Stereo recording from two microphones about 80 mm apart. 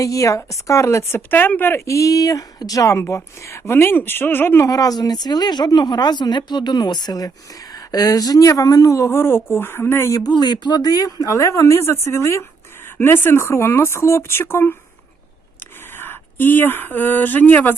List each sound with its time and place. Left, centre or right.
0.0 s speech: left
1.8 s speech: left
4.6 s speech: left
9.0 s speech: left
10.2 s speech: left
11.3 s speech: left
16.0 s speech: left